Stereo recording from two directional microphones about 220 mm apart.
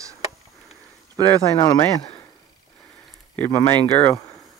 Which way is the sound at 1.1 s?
15° right (ahead or behind).